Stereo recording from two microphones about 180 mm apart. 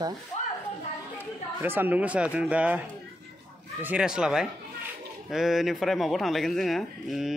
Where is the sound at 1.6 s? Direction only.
10° right (ahead or behind).